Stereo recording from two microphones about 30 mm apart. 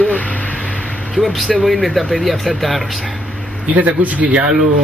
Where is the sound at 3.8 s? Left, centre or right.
Right.